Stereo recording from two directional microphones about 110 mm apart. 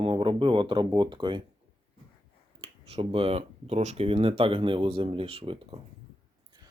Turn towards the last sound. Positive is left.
turn(degrees=-55)  # may be behind; listen again after turning